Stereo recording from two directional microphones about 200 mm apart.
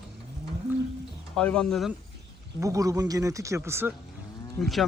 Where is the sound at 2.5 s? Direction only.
15° right (ahead or behind).